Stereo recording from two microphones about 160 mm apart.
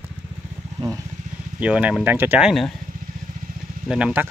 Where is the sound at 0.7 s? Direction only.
20° right (ahead or behind).